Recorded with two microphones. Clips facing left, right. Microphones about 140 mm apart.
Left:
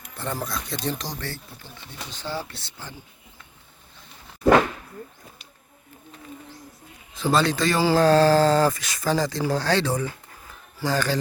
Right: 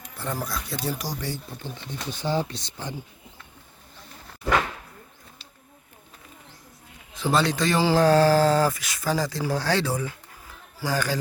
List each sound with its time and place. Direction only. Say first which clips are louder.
0.2 s speech: left 1 dB; 5° right (ahead or behind)
7.1 s speech: left 2 dB; 15° right (ahead or behind)